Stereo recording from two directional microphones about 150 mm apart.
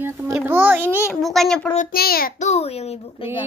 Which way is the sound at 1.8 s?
85° left.